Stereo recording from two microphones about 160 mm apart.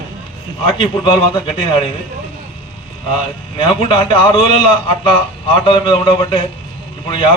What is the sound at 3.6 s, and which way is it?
A man's voice, 35° left (ahead or behind).